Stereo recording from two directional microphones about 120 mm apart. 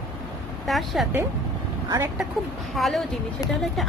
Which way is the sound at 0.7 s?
Centre (ahead or behind).